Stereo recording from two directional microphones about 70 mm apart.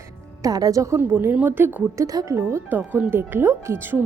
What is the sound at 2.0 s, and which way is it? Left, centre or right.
Music, right.